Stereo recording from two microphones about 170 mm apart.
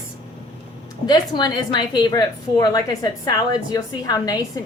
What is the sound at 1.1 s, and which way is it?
A woman's voice, 25° left (ahead or behind).